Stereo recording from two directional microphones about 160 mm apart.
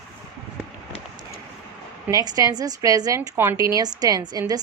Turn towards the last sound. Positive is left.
turn(degrees=-25)  # may be behind; listen again after turning